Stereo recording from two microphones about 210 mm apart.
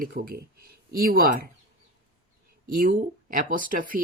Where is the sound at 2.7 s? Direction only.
40° right (ahead or behind).